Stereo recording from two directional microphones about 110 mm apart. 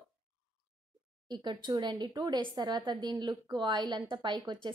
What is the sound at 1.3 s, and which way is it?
Speech, 40° right (ahead or behind).